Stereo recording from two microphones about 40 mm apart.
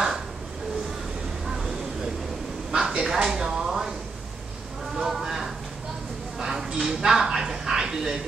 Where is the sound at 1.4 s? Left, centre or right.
Centre.